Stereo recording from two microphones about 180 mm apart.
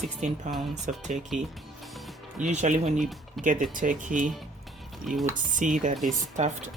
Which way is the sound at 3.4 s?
50° right (ahead or behind).